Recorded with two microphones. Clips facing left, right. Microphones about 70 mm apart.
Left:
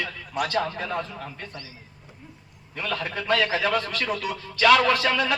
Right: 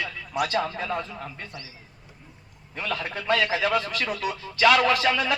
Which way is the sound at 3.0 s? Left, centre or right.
Right.